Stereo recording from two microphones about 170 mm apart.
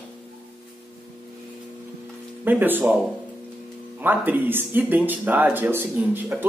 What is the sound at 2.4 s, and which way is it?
Speech, 10° right (ahead or behind).